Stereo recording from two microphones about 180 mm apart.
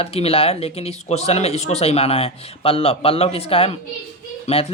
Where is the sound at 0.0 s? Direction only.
35° left (ahead or behind).